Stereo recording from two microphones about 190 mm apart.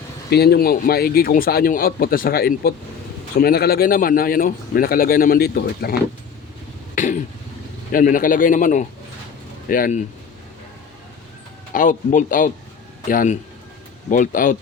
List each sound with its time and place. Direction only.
0.3 s a man's voice: 55° left (ahead or behind)
6.9 s throat clearing: 40° left (ahead or behind)
7.9 s a man's voice: 45° left (ahead or behind)
11.7 s a man's voice: 45° left (ahead or behind)